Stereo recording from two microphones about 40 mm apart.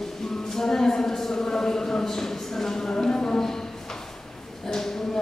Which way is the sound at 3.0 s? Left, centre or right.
Centre.